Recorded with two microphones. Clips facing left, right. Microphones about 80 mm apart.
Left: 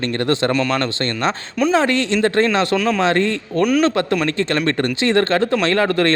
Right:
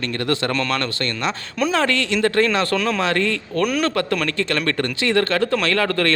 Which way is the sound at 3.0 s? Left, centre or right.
Left.